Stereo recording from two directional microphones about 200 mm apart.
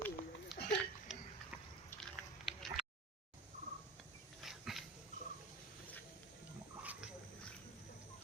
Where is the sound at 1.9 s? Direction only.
10° left (ahead or behind).